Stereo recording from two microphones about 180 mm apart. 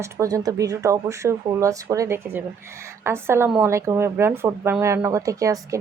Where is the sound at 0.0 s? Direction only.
15° right (ahead or behind).